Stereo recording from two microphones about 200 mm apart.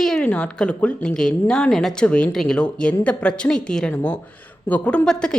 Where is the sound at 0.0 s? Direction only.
5° left (ahead or behind).